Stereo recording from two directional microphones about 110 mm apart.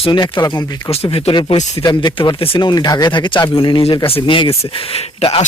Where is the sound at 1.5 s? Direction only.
90° left.